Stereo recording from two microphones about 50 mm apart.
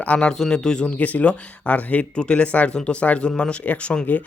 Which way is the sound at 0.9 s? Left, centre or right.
Left.